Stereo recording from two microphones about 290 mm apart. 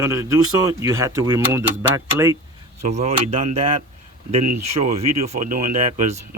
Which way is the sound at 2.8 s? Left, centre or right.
Right.